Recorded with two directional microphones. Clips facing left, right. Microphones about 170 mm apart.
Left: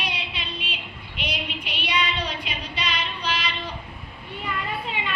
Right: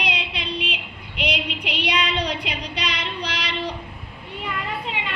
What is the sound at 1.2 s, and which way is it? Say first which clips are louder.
Female singing: right 5 dB; 80° right.